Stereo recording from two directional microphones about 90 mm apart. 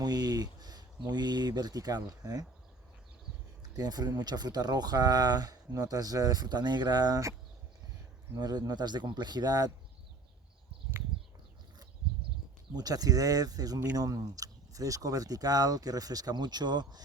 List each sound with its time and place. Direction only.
0.0 s speech: 45° right (ahead or behind)
3.8 s speech: 45° right (ahead or behind)
8.4 s speech: 45° right (ahead or behind)
12.7 s speech: 45° right (ahead or behind)